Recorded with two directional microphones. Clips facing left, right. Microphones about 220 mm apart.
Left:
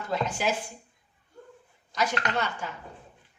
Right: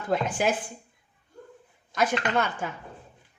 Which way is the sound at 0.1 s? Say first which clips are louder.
Right 3 dB; 55° right (ahead or behind).